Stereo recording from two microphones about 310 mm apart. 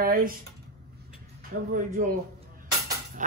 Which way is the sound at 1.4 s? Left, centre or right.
Right.